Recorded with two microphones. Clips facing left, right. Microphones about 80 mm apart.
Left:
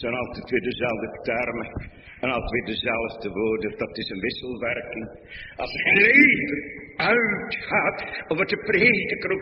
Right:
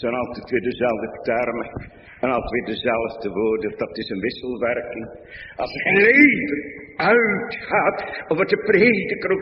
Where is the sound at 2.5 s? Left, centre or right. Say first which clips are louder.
Right 5 dB; right.